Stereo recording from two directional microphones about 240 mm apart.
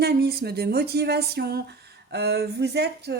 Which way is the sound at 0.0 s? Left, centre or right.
Right.